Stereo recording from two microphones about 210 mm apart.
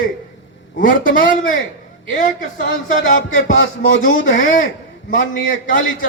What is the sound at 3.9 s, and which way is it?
Speech, 65° left (ahead or behind).